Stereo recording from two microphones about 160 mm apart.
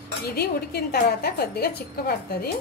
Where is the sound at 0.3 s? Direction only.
75° left (ahead or behind).